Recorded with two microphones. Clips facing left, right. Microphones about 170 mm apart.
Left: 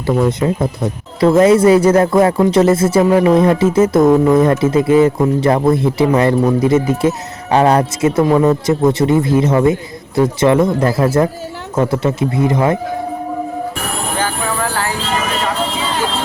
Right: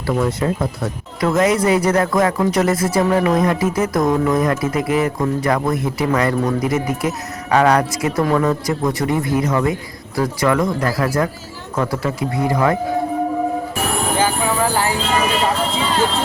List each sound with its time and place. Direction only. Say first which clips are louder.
0.1 s speech: left 4 dB; 20° left (ahead or behind)
14.2 s jingle bell: right 1 dB; 10° right (ahead or behind)